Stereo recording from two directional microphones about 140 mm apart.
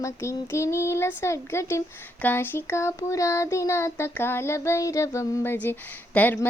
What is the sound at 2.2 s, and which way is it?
Child singing, 15° left (ahead or behind).